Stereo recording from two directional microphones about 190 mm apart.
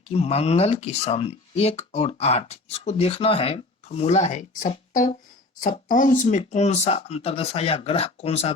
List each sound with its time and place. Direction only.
0.1 s speech: 30° left (ahead or behind)